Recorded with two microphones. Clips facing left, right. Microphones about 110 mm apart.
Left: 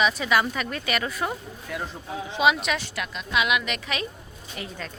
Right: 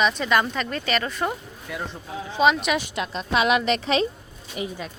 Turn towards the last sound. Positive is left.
turn(degrees=-15)  # may be behind; listen again after turning